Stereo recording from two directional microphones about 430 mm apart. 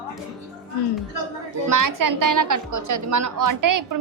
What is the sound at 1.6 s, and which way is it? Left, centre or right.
A woman's voice, right.